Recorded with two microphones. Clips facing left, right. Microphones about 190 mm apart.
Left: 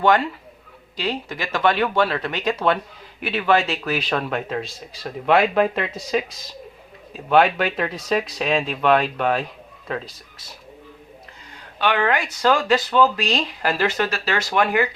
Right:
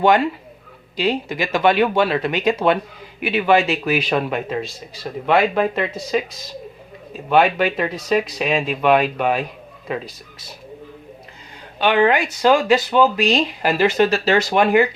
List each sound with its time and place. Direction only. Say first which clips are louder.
0.0 s a man's voice: right 3 dB; 15° right (ahead or behind)
7.3 s a man's voice: right 1 dB; 5° right (ahead or behind)
11.8 s speech: right 5 dB; 20° right (ahead or behind)